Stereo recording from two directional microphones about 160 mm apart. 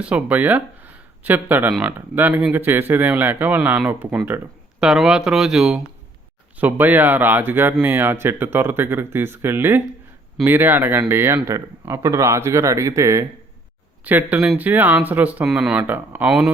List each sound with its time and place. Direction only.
0.0 s speech: 10° right (ahead or behind)